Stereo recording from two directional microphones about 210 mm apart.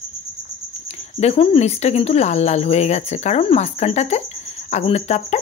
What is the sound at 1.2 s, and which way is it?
Speech, 30° left (ahead or behind).